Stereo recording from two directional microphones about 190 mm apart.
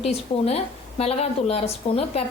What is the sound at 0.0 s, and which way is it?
A woman's voice, 30° left (ahead or behind).